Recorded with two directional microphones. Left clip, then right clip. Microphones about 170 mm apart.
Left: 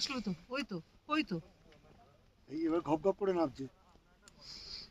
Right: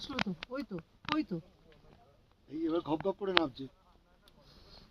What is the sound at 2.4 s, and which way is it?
Speech, 55° left (ahead or behind).